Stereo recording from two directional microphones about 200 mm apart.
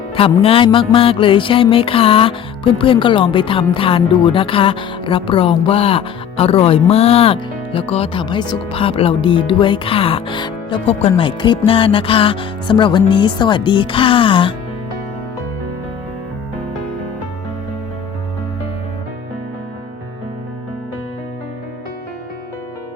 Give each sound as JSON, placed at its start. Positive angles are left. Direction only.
{"t": 0.2, "sound": "speech", "side_deg": 25}